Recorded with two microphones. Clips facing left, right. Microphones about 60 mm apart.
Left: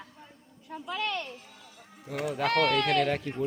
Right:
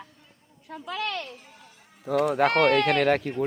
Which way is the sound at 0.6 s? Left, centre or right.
Right.